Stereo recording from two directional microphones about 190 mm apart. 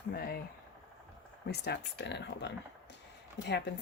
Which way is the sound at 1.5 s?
60° left (ahead or behind).